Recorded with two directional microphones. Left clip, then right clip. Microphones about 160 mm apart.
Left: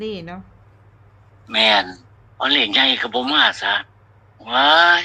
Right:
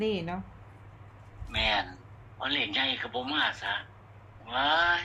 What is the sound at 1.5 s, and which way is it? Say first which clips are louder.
A man's voice: left 13 dB; 90° left.